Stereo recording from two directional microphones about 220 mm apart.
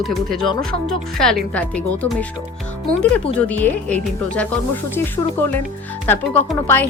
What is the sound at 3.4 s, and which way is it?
Speech, 5° left (ahead or behind).